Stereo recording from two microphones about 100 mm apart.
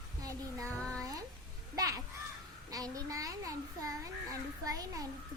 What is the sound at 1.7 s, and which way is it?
A child's voice, 35° right (ahead or behind).